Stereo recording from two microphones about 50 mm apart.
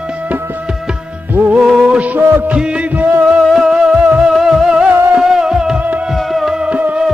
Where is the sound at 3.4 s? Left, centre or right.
Centre.